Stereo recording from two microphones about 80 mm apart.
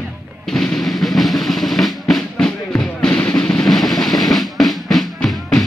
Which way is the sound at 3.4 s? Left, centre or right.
Centre.